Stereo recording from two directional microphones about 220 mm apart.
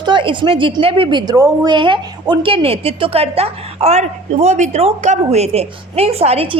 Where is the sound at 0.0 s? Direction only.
20° right (ahead or behind).